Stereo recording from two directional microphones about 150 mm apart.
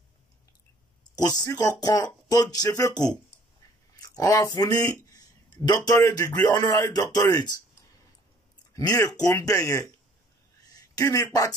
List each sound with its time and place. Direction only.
1.1 s speech: 25° left (ahead or behind)
8.7 s a man's voice: 20° left (ahead or behind)